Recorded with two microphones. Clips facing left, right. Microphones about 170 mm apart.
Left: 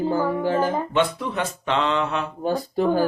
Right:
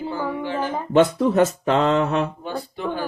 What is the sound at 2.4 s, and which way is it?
Speech, 40° left (ahead or behind).